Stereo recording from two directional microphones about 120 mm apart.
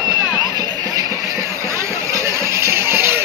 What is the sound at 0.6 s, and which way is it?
Music, 30° right (ahead or behind).